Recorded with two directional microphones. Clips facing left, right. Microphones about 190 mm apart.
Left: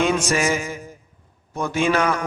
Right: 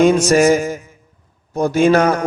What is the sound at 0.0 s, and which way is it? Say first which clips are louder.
A man's voice: right 9 dB; 40° right (ahead or behind).